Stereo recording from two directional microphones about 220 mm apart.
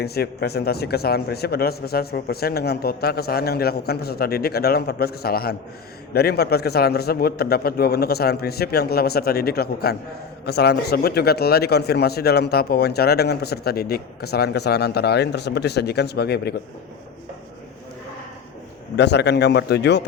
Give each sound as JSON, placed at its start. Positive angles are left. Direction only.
{"t": 0.0, "sound": "a man's voice", "side_deg": 45}
{"t": 18.9, "sound": "a man's voice", "side_deg": 50}